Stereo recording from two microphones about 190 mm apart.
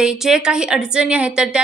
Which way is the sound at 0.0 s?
5° right (ahead or behind).